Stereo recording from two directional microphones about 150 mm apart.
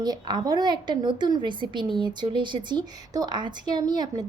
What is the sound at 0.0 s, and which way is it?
A woman's voice, 30° right (ahead or behind).